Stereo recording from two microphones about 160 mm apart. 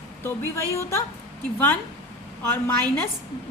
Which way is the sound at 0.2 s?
15° left (ahead or behind).